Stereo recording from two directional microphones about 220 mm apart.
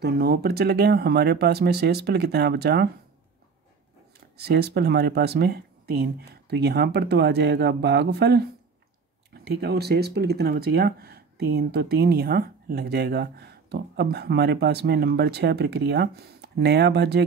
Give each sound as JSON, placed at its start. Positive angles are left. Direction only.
{"t": 0.0, "sound": "speech", "side_deg": -45}
{"t": 4.4, "sound": "speech", "side_deg": -45}